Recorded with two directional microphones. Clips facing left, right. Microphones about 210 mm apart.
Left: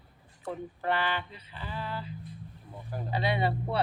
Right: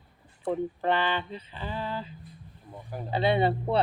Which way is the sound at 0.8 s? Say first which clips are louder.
Right 2 dB; 25° right (ahead or behind).